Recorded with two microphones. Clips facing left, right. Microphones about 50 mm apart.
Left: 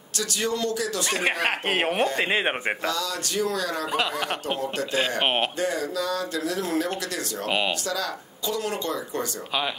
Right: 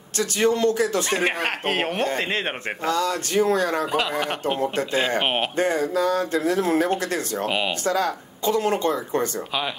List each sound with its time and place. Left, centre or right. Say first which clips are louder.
0.2 s speech: right 7 dB; right
1.2 s speech: right 1 dB; centre
2.8 s speech: right 5 dB; right
3.9 s speech: right 2 dB; centre
5.6 s speech: right 5 dB; right
7.4 s speech: left 1 dB; centre
7.8 s speech: right 6 dB; right